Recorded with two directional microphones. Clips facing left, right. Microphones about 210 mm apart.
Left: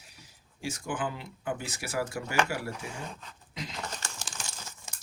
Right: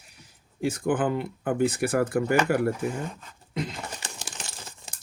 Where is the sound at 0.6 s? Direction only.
55° right (ahead or behind).